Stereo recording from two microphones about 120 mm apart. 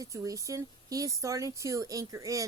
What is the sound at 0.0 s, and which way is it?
A woman's voice, 30° right (ahead or behind).